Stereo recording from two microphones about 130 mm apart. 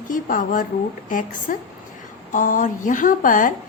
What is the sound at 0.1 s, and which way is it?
A woman's voice, 90° left.